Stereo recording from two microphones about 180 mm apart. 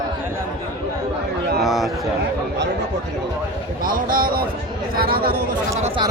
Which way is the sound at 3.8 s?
50° right (ahead or behind).